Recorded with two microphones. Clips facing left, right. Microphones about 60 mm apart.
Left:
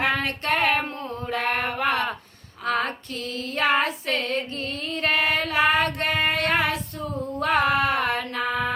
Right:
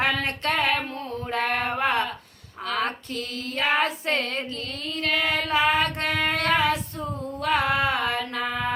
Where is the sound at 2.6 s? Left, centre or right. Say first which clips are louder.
Left 4 dB; right.